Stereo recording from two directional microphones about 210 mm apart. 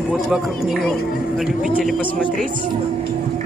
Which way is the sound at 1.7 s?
Centre (ahead or behind).